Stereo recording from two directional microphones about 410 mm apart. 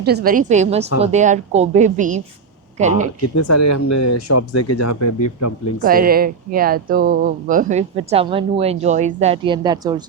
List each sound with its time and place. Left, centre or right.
0.0 s a woman's voice: right
3.2 s speech: left
5.8 s speech: right